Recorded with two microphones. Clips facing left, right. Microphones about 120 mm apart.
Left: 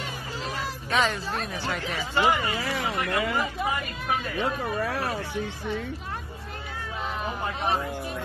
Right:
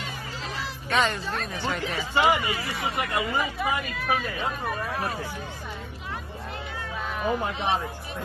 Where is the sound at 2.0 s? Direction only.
10° right (ahead or behind).